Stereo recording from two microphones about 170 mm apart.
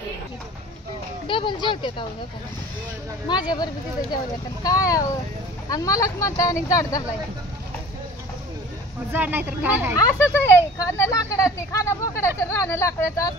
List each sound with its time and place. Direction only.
1.2 s speech: 30° left (ahead or behind)
3.3 s speech: 25° left (ahead or behind)
4.6 s speech: 20° left (ahead or behind)
9.1 s a woman's voice: 10° right (ahead or behind)
9.9 s speech: 15° left (ahead or behind)